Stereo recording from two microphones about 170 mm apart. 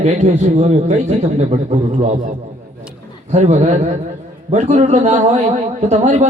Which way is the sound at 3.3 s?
40° right (ahead or behind).